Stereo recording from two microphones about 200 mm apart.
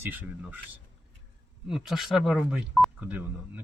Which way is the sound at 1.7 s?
Centre (ahead or behind).